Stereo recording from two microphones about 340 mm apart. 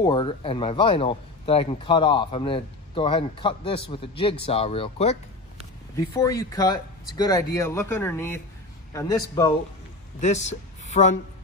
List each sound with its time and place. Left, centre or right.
0.0 s speech: centre